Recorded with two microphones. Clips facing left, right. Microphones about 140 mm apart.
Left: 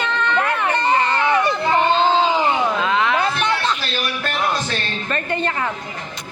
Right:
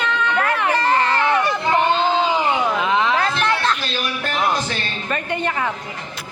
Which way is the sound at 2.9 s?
20° right (ahead or behind).